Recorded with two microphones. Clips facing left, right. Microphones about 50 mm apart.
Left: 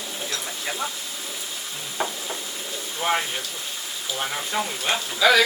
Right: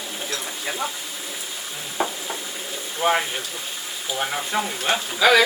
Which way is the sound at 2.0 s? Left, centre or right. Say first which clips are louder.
Right 3 dB; centre.